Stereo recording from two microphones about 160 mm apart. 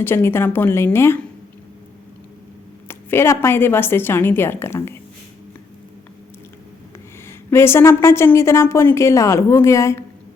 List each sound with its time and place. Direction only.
0.0 s a woman's voice: 15° left (ahead or behind)
2.8 s a woman's voice: 15° left (ahead or behind)
7.3 s a woman's voice: 15° left (ahead or behind)